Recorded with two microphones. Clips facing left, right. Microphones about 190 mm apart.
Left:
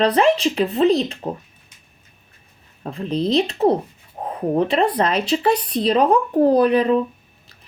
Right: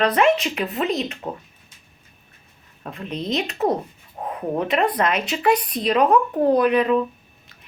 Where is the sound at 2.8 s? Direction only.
30° left (ahead or behind).